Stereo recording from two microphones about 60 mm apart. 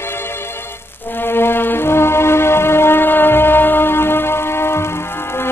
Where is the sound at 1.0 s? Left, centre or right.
Left.